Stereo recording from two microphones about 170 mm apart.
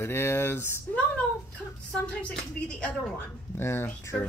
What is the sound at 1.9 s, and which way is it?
A woman's voice, 5° left (ahead or behind).